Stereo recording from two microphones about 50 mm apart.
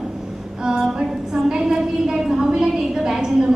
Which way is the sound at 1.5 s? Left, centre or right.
Centre.